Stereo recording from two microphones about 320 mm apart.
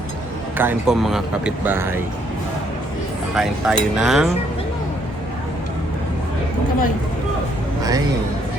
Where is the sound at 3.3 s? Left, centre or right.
Centre.